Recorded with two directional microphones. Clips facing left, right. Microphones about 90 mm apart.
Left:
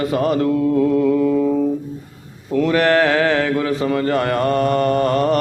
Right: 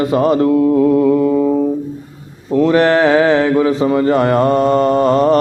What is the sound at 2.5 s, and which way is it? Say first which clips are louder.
A man's voice: right 4 dB; 25° right (ahead or behind).